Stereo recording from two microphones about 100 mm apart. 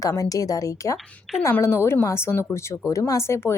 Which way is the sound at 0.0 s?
35° left (ahead or behind).